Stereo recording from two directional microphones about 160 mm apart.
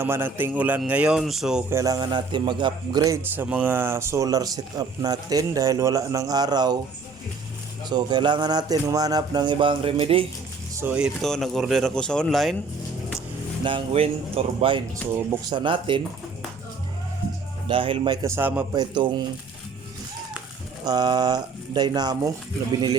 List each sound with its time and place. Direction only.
0.0 s a man's voice: 15° right (ahead or behind)
1.7 s a man's voice: 20° right (ahead or behind)
3.3 s a man's voice: 10° right (ahead or behind); by 6.7 s 25° right (ahead or behind)
7.9 s a man's voice: 25° right (ahead or behind)
10.8 s speech: 10° right (ahead or behind)
13.7 s a man's voice: 35° right (ahead or behind)
17.7 s a man's voice: 35° right (ahead or behind); by 18.6 s 15° right (ahead or behind)
18.7 s a man's voice: 25° right (ahead or behind)
20.8 s a man's voice: 25° right (ahead or behind)